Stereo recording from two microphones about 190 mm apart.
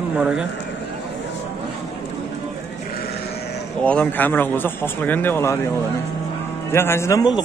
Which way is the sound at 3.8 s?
5° left (ahead or behind).